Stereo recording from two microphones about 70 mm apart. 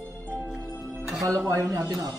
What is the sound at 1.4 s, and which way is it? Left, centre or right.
Speech, right.